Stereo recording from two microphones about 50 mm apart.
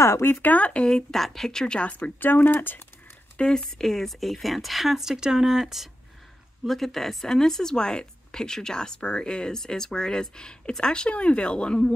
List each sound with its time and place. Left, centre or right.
0.0 s speech: left
0.3 s speech: left
0.8 s speech: centre
1.9 s speech: left
3.3 s speech: centre
6.7 s speech: centre